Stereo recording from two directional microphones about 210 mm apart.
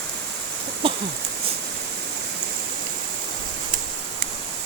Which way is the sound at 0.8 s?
25° right (ahead or behind).